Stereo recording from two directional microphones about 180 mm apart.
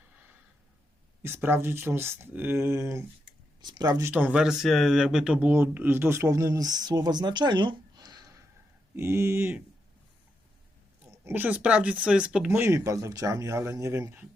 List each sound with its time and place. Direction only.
1.2 s speech: 15° right (ahead or behind)
4.1 s speech: 5° right (ahead or behind)
11.0 s speech: 15° right (ahead or behind)